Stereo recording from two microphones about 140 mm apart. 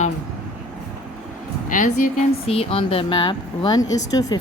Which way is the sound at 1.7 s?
65° left (ahead or behind).